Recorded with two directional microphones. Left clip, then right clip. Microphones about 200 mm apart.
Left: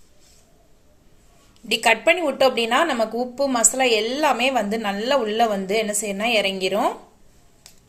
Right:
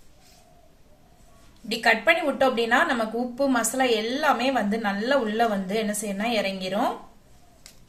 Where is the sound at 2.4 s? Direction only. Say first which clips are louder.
Left 3 dB; 35° left (ahead or behind).